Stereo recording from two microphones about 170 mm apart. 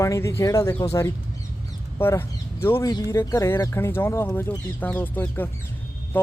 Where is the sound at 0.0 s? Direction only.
15° left (ahead or behind).